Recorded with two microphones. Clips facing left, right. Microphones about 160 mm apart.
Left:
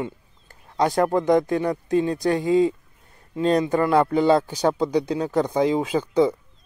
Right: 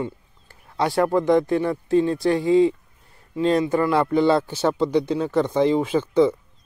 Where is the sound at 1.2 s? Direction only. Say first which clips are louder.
Right 2 dB; 45° left (ahead or behind).